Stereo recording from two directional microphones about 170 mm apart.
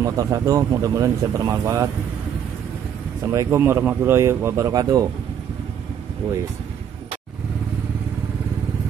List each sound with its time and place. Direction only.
0.0 s speech: 20° right (ahead or behind)
3.3 s speech: 15° right (ahead or behind)